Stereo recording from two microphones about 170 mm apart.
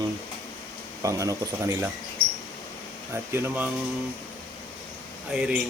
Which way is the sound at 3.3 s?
10° right (ahead or behind).